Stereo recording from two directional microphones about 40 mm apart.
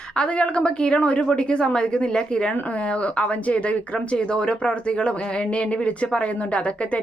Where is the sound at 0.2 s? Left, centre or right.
Left.